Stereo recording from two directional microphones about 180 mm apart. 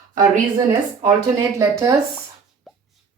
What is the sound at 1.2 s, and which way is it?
Speech, 15° right (ahead or behind).